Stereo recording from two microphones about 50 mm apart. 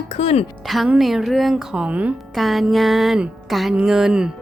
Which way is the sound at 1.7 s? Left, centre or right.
Right.